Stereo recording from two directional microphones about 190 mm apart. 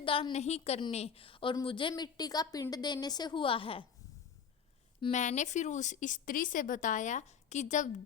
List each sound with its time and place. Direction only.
0.0 s a woman's voice: 30° left (ahead or behind)
5.1 s a woman's voice: 40° left (ahead or behind)